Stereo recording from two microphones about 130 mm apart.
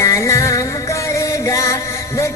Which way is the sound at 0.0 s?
25° left (ahead or behind).